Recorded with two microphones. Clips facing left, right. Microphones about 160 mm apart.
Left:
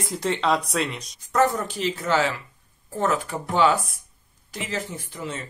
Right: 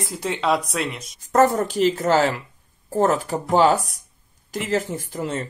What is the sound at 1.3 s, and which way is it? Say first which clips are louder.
Speech: right 4 dB; 45° right (ahead or behind).